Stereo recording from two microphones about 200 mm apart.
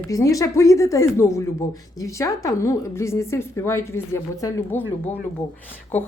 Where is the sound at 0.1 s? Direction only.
15° left (ahead or behind).